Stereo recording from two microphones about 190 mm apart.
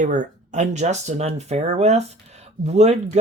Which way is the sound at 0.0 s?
40° right (ahead or behind).